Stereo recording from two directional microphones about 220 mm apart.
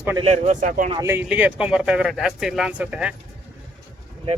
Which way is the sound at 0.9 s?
15° right (ahead or behind).